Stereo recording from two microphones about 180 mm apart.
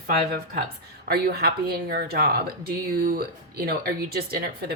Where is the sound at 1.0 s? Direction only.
60° right (ahead or behind).